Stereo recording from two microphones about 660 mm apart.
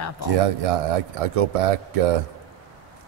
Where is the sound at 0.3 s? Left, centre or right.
Right.